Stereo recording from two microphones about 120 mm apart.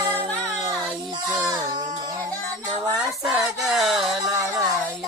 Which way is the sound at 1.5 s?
35° right (ahead or behind).